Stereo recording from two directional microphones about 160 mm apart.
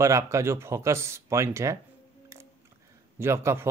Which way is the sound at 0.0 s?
20° right (ahead or behind).